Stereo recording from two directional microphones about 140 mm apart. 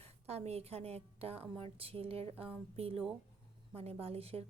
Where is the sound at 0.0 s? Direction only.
50° right (ahead or behind).